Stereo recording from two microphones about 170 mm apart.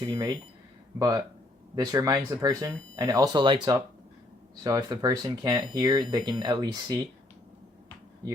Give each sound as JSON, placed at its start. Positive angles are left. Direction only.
{"t": 0.0, "sound": "speech", "side_deg": -20}